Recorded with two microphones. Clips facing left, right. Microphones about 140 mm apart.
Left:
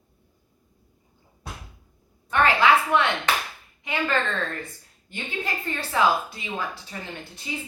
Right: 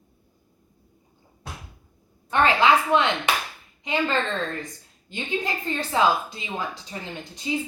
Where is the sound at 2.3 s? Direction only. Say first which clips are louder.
Right 1 dB; 20° right (ahead or behind).